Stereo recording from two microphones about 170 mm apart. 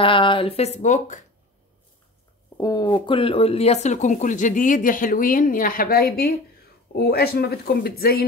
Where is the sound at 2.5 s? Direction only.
20° left (ahead or behind).